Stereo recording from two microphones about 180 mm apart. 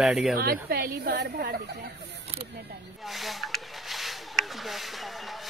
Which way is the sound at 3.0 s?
Centre (ahead or behind).